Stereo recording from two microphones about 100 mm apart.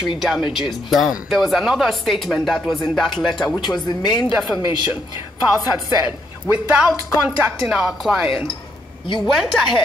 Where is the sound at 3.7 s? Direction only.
45° left (ahead or behind).